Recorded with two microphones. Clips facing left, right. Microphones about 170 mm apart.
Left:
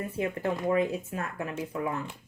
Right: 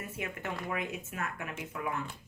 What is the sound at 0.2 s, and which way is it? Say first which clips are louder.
Speech: left 9 dB; 35° left (ahead or behind).